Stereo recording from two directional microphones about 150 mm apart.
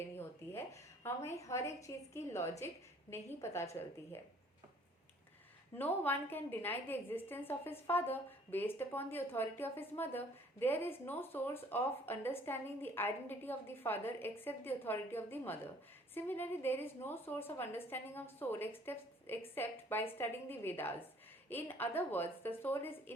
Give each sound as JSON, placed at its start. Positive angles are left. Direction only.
{"t": 0.2, "sound": "a woman's voice", "side_deg": 15}
{"t": 5.7, "sound": "a woman's voice", "side_deg": 10}